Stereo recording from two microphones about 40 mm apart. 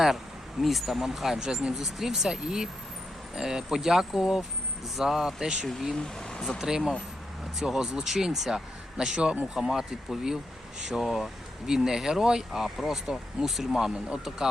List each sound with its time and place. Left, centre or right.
0.6 s speech: centre
5.9 s speech: centre
6.6 s speech: centre